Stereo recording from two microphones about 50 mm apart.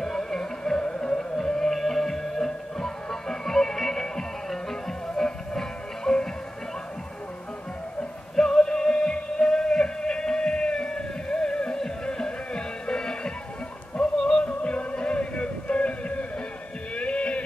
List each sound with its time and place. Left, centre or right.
0.0 s music: centre
8.0 s music: centre
16.9 s a sound: left